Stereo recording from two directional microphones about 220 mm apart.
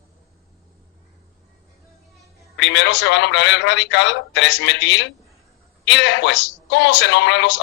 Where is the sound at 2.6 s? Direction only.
55° left (ahead or behind).